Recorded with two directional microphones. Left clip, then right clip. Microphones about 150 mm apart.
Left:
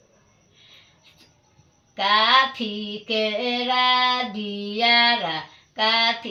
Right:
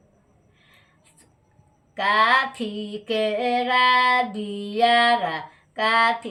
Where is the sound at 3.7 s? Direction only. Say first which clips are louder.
Right 2 dB; 50° right (ahead or behind).